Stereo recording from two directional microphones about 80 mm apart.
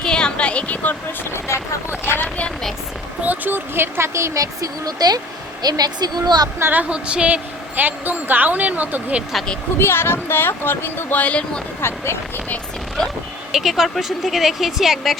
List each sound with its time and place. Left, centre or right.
0.0 s a sound: centre
2.0 s speech: left
3.2 s speech: right
6.6 s a woman's voice: right
9.7 s speech: left; by 11.6 s centre
11.8 s speech: left
13.5 s speech: centre